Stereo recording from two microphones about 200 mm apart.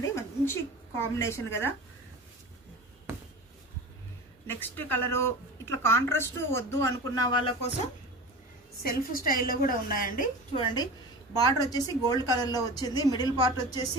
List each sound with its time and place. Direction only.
0.0 s a woman's voice: 10° left (ahead or behind)
4.5 s speech: 10° left (ahead or behind); by 7.7 s 25° left (ahead or behind)
8.8 s a woman's voice: 45° left (ahead or behind)
10.5 s a woman's voice: 25° left (ahead or behind)